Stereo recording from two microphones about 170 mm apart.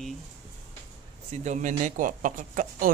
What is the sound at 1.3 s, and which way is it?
Speech, 45° right (ahead or behind).